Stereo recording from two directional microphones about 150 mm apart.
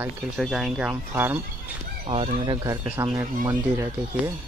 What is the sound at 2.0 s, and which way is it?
Speech, 40° right (ahead or behind).